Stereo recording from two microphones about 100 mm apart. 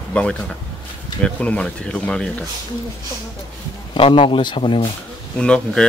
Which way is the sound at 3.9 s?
60° left (ahead or behind).